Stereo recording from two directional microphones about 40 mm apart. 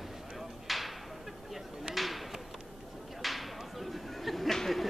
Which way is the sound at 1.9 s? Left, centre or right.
Centre.